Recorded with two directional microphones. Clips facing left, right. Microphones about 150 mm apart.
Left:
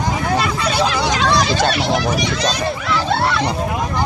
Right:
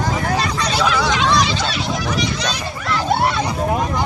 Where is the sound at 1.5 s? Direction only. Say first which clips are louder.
Left 5 dB; 55° left (ahead or behind); by 2.0 s 70° left (ahead or behind).